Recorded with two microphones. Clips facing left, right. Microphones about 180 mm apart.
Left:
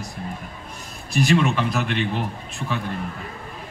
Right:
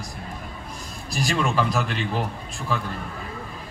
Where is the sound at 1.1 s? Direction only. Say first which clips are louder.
Left 5 dB; 35° right (ahead or behind).